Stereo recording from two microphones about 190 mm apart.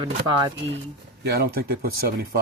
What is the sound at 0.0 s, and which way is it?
Speech, 25° right (ahead or behind).